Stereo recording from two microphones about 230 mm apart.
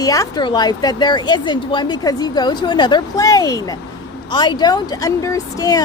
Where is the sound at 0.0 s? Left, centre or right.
Centre.